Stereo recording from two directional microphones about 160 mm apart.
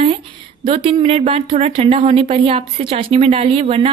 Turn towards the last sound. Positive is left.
turn(degrees=-35)  # may be behind; listen again after turning